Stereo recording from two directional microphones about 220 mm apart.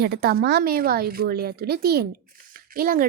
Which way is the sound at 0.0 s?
45° right (ahead or behind).